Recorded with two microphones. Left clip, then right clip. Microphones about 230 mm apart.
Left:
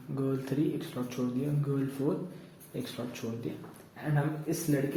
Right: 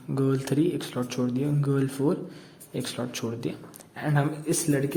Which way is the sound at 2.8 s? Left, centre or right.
Right.